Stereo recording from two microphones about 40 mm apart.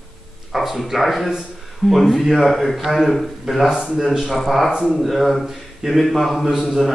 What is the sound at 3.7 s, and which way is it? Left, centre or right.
Speech, centre.